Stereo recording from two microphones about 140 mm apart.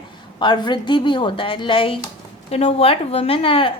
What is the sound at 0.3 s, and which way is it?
A woman's voice, 35° left (ahead or behind).